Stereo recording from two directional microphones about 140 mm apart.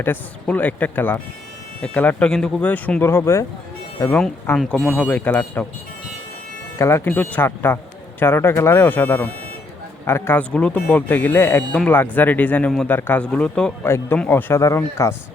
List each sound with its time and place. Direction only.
0.0 s speech: 15° left (ahead or behind)
4.5 s speech: centre (ahead or behind)
6.7 s speech: 20° left (ahead or behind)